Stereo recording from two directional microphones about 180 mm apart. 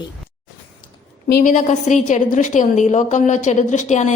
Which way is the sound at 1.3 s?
50° left (ahead or behind).